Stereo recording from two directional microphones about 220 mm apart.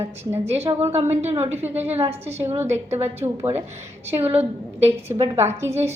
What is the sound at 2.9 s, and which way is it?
A woman's voice, 10° right (ahead or behind).